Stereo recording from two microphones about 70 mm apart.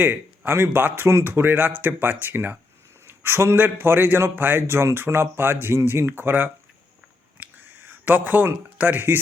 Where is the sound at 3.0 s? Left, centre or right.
Right.